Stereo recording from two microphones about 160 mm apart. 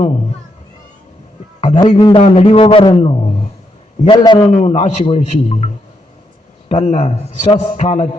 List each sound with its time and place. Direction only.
1.8 s a man's voice: 25° left (ahead or behind); by 3.5 s 45° left (ahead or behind)
4.0 s a man's voice: 25° left (ahead or behind)
4.5 s a man's voice: 45° left (ahead or behind)